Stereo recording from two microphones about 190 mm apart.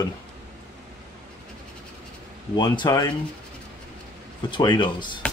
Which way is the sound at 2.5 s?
25° left (ahead or behind).